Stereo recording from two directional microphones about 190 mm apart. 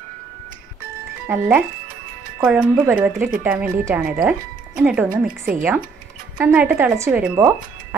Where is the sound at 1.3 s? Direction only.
10° right (ahead or behind).